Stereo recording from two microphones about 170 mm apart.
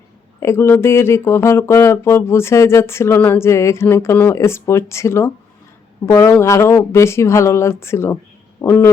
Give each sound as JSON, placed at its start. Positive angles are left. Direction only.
{"t": 0.3, "sound": "speech", "side_deg": 15}